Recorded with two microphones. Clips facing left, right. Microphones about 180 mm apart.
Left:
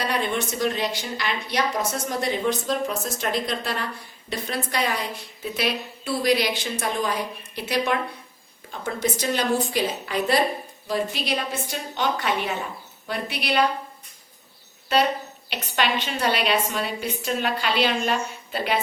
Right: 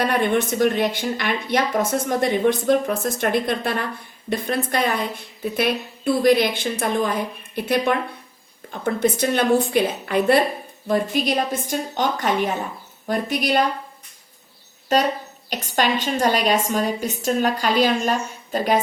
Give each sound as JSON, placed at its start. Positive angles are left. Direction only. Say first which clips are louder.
{"t": 0.0, "sound": "a woman's voice", "louder": "right 6 dB", "side_deg": -55}
{"t": 14.9, "sound": "a woman's voice", "louder": "right 2 dB", "side_deg": -40}